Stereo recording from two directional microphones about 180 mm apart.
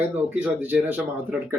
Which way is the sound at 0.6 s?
10° right (ahead or behind).